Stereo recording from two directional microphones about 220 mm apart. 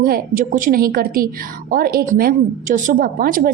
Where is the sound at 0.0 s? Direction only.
40° right (ahead or behind).